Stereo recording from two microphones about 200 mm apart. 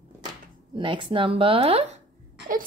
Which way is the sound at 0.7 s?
25° right (ahead or behind).